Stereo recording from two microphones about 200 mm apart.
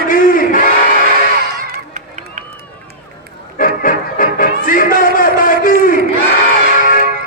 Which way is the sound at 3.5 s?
45° left (ahead or behind).